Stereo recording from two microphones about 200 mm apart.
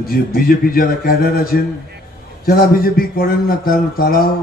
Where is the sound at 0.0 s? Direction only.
50° left (ahead or behind).